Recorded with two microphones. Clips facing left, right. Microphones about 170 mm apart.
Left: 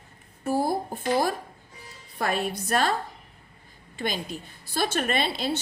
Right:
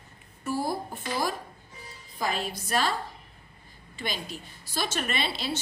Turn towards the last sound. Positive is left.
turn(degrees=50)  # may be behind; listen again after turning